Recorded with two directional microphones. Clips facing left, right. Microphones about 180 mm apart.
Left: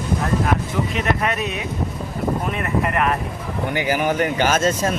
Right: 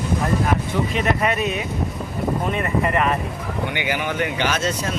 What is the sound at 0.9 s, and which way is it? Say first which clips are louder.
Speech: right 2 dB; centre (ahead or behind).